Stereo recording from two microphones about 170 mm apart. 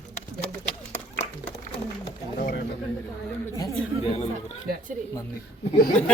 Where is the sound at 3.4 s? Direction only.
20° left (ahead or behind).